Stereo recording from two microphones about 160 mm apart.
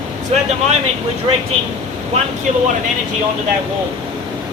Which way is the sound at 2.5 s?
45° right (ahead or behind).